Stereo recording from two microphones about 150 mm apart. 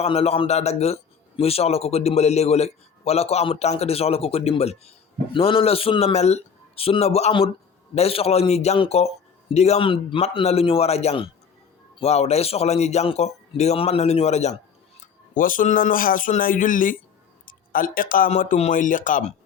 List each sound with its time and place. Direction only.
0.0 s a man's voice: 40° left (ahead or behind)
15.0 s speech: 65° left (ahead or behind)
17.4 s a sound: 70° left (ahead or behind)
18.3 s speech: 55° left (ahead or behind)